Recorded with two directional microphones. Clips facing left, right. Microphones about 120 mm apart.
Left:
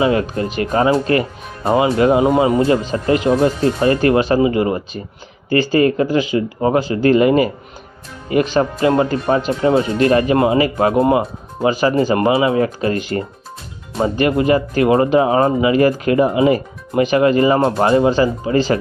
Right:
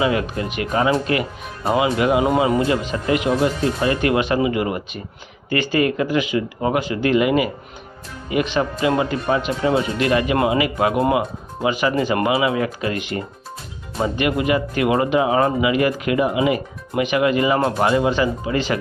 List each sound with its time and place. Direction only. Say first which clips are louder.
0.0 s speech: left 4 dB; 35° left (ahead or behind)